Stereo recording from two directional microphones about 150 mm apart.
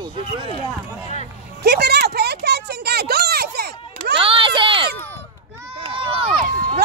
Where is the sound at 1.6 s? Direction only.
90° right.